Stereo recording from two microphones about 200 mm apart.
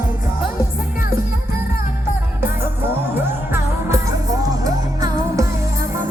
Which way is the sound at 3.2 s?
15° right (ahead or behind).